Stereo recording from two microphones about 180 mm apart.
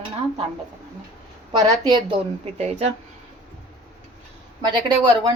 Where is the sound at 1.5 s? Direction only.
20° right (ahead or behind).